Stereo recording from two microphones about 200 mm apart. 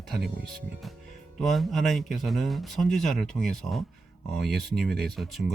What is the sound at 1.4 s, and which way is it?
Speech, centre (ahead or behind).